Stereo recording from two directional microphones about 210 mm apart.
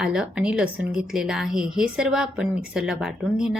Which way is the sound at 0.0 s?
5° right (ahead or behind).